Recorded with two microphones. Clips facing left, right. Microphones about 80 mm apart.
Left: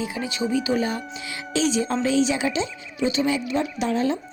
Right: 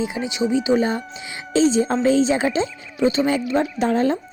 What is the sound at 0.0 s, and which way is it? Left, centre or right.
Speech, right.